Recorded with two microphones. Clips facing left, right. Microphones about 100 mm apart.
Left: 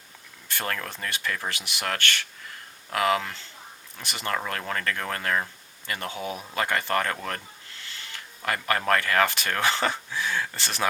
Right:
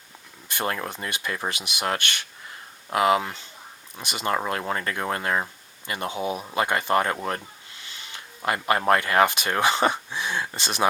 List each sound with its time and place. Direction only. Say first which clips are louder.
0.4 s speech: right 3 dB; 20° right (ahead or behind)